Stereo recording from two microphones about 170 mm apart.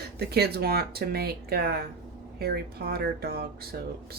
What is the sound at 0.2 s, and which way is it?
Speech, 70° right (ahead or behind).